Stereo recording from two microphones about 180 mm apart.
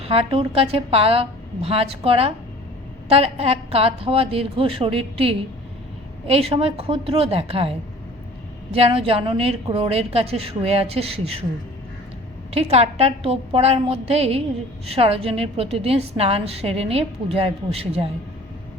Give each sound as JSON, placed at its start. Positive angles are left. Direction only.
{"t": 0.0, "sound": "a woman's voice", "side_deg": -35}
{"t": 6.8, "sound": "a woman's voice", "side_deg": -30}
{"t": 8.7, "sound": "a woman's voice", "side_deg": -35}
{"t": 12.5, "sound": "a woman's voice", "side_deg": -35}